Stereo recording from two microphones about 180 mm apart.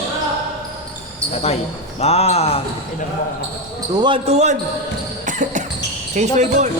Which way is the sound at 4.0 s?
30° right (ahead or behind).